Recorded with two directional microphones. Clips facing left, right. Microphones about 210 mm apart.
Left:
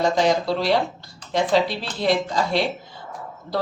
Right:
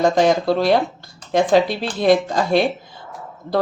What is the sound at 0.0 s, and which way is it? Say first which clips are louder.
Speech: right 4 dB; 50° right (ahead or behind).